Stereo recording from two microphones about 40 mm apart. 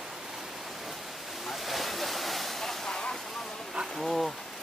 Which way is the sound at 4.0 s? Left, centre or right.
Centre.